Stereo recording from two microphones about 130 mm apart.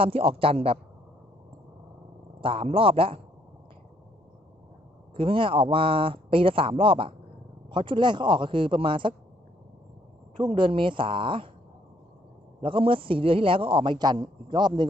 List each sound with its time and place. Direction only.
0.0 s a man's voice: 45° right (ahead or behind)
2.4 s a man's voice: 45° right (ahead or behind)
5.1 s a man's voice: 40° right (ahead or behind)
10.5 s a man's voice: 40° right (ahead or behind)
12.6 s a man's voice: 40° right (ahead or behind)